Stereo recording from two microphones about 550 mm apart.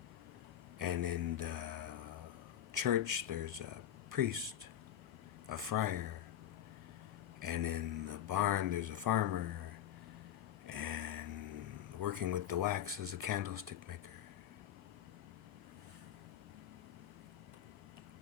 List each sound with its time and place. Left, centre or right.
0.8 s mantra: right
2.7 s speech: right
5.5 s speech: right
7.4 s speech: right
10.7 s a sound: right
11.9 s speech: right